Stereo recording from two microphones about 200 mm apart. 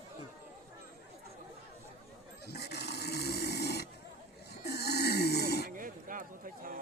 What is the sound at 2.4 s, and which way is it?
Snoring, 55° left (ahead or behind).